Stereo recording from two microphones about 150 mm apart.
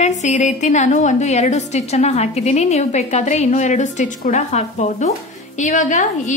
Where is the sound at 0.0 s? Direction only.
50° left (ahead or behind).